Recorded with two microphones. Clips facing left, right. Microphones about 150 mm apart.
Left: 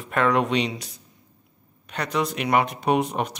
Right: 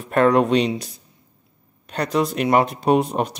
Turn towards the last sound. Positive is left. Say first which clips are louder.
# right 4 dB
turn(degrees=-35)  # may be behind; listen again after turning